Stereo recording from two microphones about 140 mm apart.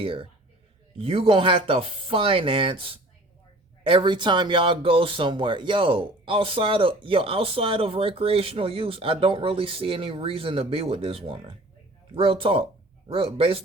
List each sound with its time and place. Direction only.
0.0 s speech: 40° right (ahead or behind)